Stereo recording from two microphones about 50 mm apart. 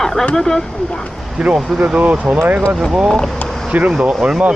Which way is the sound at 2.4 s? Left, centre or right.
Right.